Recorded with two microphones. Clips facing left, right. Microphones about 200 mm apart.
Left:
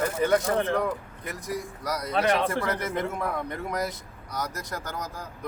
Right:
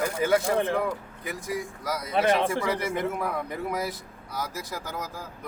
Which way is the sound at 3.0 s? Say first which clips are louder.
Right 1 dB; centre (ahead or behind).